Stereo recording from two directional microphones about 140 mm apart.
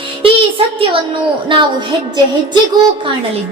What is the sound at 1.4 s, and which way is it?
Child singing, 35° right (ahead or behind).